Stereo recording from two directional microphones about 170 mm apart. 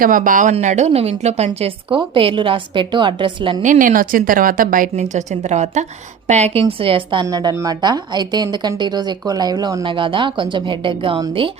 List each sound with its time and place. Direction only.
0.0 s a woman's voice: 55° right (ahead or behind); by 3.6 s 30° right (ahead or behind)
3.6 s a woman's voice: 50° right (ahead or behind); by 11.5 s 30° right (ahead or behind)